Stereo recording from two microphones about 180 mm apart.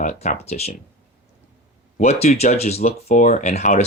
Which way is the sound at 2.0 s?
35° left (ahead or behind).